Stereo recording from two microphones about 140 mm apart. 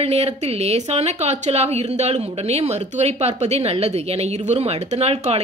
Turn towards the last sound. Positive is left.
turn(degrees=-50)  # may be behind; listen again after turning